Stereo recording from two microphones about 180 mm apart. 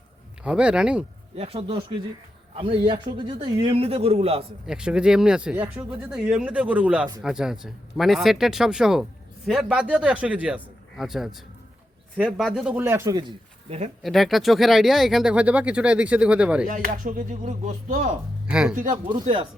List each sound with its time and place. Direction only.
0.4 s speech: 5° right (ahead or behind)
1.4 s a man's voice: 35° right (ahead or behind)
4.6 s a man's voice: 5° right (ahead or behind)
13.7 s speech: 35° right (ahead or behind)
14.0 s speech: centre (ahead or behind)
16.6 s speech: 50° right (ahead or behind)
18.4 s speech: 5° right (ahead or behind)